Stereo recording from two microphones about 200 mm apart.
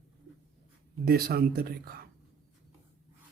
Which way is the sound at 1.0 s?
50° right (ahead or behind).